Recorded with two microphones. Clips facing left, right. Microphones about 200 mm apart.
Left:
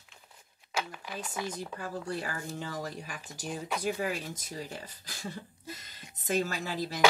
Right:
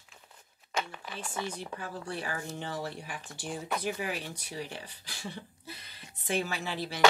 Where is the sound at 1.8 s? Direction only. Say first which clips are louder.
Left 2 dB; 40° left (ahead or behind).